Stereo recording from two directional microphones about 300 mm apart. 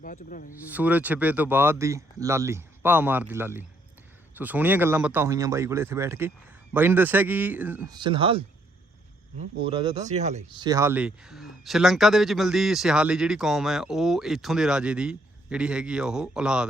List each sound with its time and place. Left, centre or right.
0.0 s speech: left
0.7 s speech: centre
9.6 s speech: centre
10.7 s speech: centre